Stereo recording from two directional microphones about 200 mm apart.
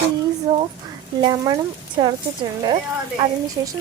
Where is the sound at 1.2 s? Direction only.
20° right (ahead or behind).